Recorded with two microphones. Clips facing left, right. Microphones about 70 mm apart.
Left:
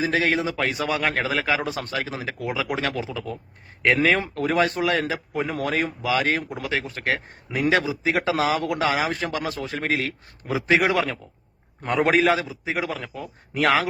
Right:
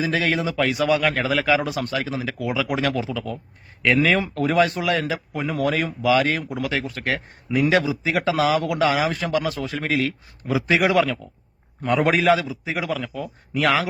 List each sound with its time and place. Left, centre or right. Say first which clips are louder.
0.0 s a man's voice: even; left